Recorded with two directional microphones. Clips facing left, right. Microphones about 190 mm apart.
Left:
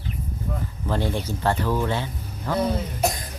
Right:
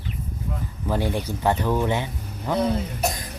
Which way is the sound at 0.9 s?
15° right (ahead or behind).